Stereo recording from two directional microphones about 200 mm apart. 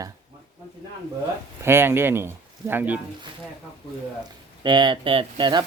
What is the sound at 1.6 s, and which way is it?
Speech, 10° right (ahead or behind).